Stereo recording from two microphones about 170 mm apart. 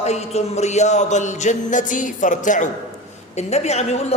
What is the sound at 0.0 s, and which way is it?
A woman's voice, 40° left (ahead or behind).